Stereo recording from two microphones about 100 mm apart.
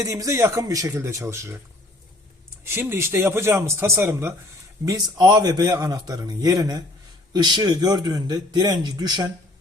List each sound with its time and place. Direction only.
0.0 s a man's voice: 35° right (ahead or behind)
2.6 s a man's voice: 25° right (ahead or behind)
4.9 s a man's voice: 45° right (ahead or behind)